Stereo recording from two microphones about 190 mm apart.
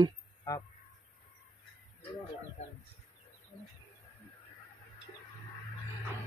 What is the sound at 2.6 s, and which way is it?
Bird, 35° left (ahead or behind).